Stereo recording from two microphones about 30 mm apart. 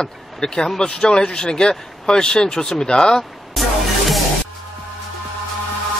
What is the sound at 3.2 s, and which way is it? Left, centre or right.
Music, centre.